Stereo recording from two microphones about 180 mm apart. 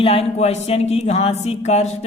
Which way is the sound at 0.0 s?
35° left (ahead or behind).